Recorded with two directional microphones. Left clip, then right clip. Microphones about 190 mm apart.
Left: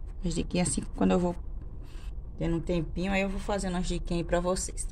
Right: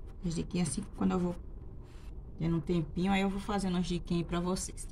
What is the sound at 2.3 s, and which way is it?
A woman's voice, 45° left (ahead or behind).